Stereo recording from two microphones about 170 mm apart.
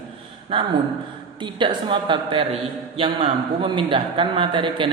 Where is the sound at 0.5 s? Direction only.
30° right (ahead or behind).